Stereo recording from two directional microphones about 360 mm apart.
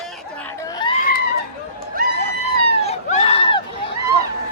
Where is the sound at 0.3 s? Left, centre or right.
Centre.